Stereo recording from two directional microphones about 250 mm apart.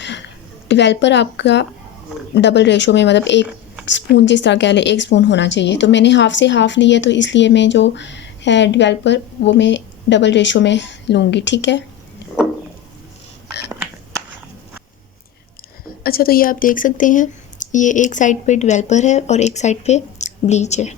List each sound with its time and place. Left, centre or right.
0.0 s a sound: left
0.7 s a woman's voice: left
16.0 s speech: left